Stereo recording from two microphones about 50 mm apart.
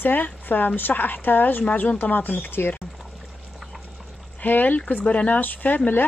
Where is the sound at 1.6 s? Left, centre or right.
Left.